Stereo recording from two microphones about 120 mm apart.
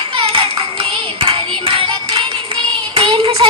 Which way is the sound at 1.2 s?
50° right (ahead or behind).